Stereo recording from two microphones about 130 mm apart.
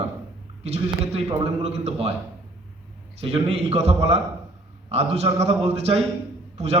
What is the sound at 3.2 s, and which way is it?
A man's voice, 50° right (ahead or behind).